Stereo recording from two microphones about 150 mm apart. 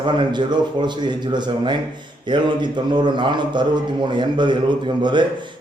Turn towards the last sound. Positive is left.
turn(degrees=-30)  # may be behind; listen again after turning